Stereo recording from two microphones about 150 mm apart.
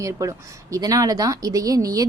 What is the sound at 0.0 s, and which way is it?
Speech, 20° right (ahead or behind).